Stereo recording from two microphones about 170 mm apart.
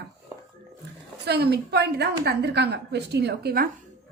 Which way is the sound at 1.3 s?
75° right (ahead or behind).